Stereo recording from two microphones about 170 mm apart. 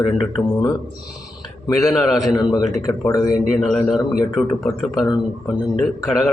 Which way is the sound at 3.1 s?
20° left (ahead or behind).